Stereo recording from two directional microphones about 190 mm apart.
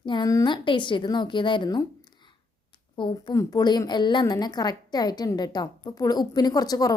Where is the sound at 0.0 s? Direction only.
20° left (ahead or behind).